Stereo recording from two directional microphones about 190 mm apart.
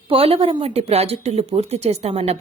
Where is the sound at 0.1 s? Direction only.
30° right (ahead or behind).